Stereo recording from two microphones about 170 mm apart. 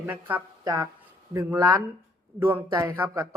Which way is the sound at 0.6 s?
25° right (ahead or behind).